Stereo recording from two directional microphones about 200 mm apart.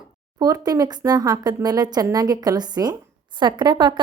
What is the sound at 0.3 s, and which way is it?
Speech, 20° right (ahead or behind).